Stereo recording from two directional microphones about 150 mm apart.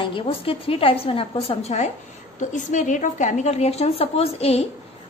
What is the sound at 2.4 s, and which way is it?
A woman's voice, 55° left (ahead or behind).